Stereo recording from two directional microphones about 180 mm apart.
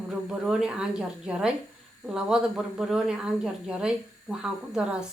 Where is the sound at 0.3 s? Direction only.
5° right (ahead or behind).